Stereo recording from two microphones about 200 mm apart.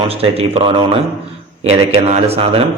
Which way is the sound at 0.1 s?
30° right (ahead or behind).